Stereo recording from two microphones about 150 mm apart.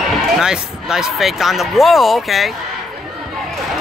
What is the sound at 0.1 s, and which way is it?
Speech, 5° right (ahead or behind).